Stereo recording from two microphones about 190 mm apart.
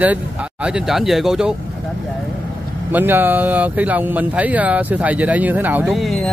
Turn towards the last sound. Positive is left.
turn(degrees=0)  # may be behind; listen again after turning